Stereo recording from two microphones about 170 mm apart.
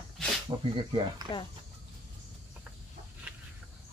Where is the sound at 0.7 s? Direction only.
30° right (ahead or behind).